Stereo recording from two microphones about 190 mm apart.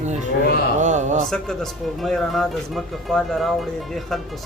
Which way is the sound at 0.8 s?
40° right (ahead or behind).